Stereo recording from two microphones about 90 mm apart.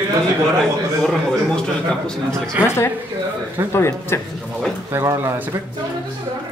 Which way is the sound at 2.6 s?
25° left (ahead or behind).